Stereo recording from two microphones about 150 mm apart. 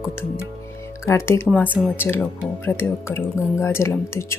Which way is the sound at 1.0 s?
20° left (ahead or behind).